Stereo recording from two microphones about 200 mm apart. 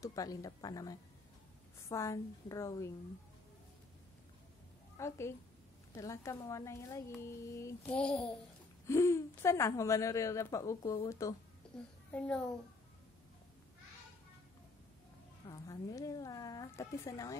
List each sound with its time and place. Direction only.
0.0 s speech: 15° left (ahead or behind)
4.9 s a woman's voice: 15° left (ahead or behind)
11.6 s a sound: 5° left (ahead or behind)
12.1 s a child's voice: 5° left (ahead or behind)
15.4 s speech: 15° left (ahead or behind)